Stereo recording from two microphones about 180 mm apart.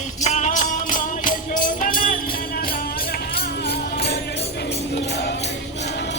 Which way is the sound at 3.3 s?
60° left (ahead or behind).